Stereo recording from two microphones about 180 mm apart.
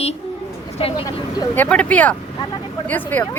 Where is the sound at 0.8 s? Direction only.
30° left (ahead or behind).